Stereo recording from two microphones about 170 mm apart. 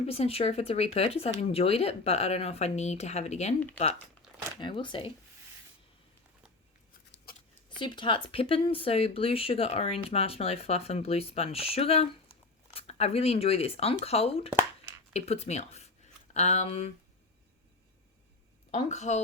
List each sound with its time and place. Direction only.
0.0 s speech: 35° left (ahead or behind)
4.2 s a sound: centre (ahead or behind)
4.6 s speech: 30° left (ahead or behind)
7.8 s speech: 30° left (ahead or behind)
18.7 s a woman's voice: 45° left (ahead or behind)